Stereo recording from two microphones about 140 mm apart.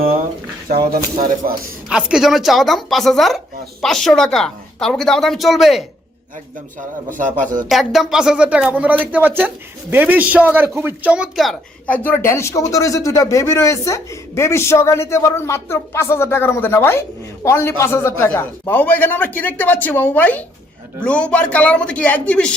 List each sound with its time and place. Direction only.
0.7 s speech: 90° right
1.9 s speech: 5° right (ahead or behind)
7.1 s speech: 70° right (ahead or behind)
7.7 s speech: centre (ahead or behind)
11.9 s a man's voice: 15° left (ahead or behind)